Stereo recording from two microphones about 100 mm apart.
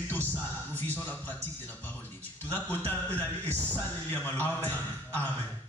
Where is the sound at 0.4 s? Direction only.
20° left (ahead or behind).